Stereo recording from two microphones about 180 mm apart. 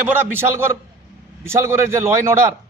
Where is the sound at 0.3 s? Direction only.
15° right (ahead or behind).